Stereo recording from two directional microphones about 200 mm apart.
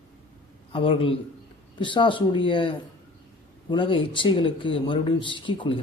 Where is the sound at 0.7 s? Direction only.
25° left (ahead or behind).